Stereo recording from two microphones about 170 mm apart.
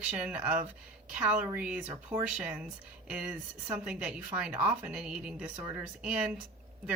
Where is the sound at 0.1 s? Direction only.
5° right (ahead or behind).